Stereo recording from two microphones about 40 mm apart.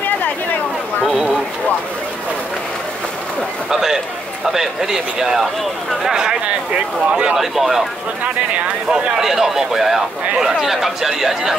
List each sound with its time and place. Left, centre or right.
3.7 s speech: centre; by 7.3 s right
7.3 s speech: centre
8.5 s speech: right
9.2 s speech: centre